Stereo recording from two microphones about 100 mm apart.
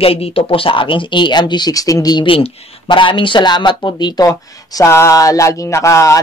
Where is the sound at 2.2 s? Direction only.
60° left (ahead or behind).